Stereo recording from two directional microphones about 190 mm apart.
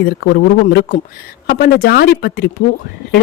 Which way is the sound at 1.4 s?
55° left (ahead or behind).